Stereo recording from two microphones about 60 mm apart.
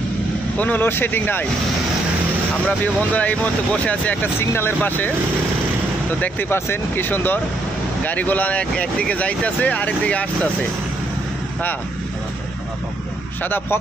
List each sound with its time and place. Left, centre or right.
0.6 s speech: left
2.8 s speech: left
4.4 s speech: left
6.5 s speech: left